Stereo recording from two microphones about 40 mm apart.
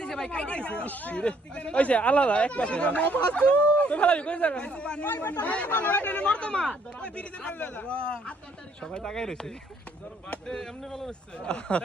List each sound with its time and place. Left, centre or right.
0.3 s speech: left
0.9 s speech: left
1.1 s speech: left
5.0 s speech: left
6.2 s speech: left
11.3 s speech: left